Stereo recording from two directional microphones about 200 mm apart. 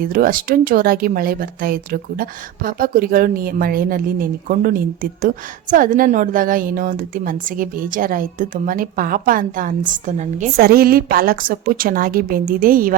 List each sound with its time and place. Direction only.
0.0 s a woman's voice: 45° right (ahead or behind)